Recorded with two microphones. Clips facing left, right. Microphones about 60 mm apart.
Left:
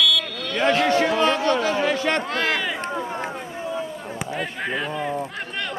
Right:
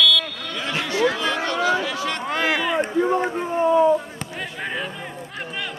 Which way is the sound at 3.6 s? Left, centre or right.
Right.